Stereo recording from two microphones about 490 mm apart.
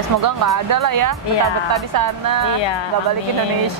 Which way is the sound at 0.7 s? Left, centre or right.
Right.